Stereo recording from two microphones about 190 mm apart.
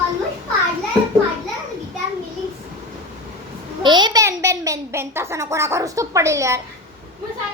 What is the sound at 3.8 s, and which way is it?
A child's voice, 25° right (ahead or behind).